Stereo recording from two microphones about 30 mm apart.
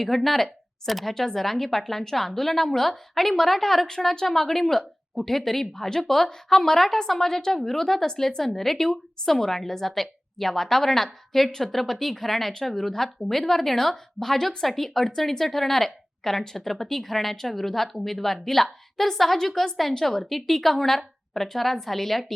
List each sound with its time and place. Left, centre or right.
0.0 s a woman's voice: centre
5.7 s a woman's voice: centre